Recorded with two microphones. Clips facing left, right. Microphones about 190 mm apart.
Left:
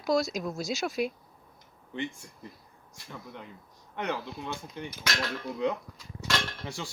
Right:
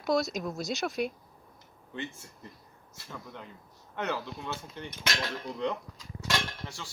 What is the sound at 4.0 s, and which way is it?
A man's voice, 15° left (ahead or behind).